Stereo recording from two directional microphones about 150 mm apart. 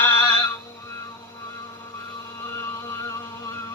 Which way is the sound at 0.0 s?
15° left (ahead or behind).